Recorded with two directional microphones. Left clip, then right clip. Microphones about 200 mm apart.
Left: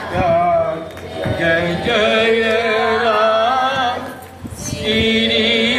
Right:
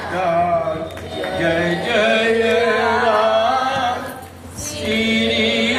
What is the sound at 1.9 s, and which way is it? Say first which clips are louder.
Music: left 2 dB; 45° left (ahead or behind).